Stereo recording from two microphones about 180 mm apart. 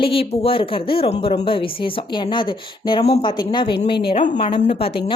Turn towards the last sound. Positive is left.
turn(degrees=30)  # may be behind; listen again after turning